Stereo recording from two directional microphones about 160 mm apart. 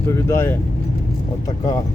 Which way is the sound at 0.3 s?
15° left (ahead or behind).